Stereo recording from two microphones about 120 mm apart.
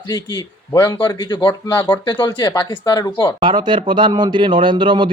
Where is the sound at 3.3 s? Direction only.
40° right (ahead or behind).